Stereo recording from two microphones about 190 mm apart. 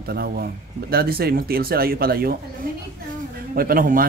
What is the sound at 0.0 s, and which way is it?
Speech, 55° right (ahead or behind).